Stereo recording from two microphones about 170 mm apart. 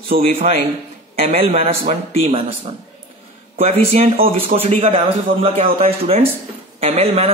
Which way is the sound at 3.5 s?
35° right (ahead or behind).